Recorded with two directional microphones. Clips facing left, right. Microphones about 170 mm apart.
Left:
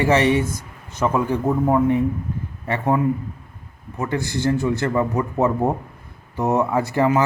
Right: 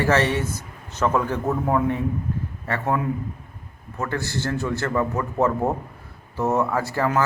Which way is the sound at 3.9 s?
15° left (ahead or behind).